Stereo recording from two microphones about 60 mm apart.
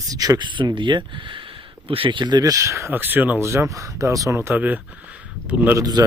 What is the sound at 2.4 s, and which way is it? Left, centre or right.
Speech, right.